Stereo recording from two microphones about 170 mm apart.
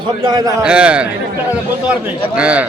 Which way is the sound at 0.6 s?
5° right (ahead or behind).